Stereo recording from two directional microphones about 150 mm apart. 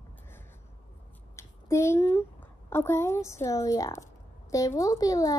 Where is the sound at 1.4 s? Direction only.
20° left (ahead or behind).